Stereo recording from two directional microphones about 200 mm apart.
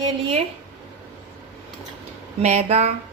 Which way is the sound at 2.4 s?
35° right (ahead or behind).